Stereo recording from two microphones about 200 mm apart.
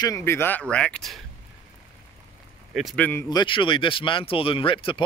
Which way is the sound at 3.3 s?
25° left (ahead or behind).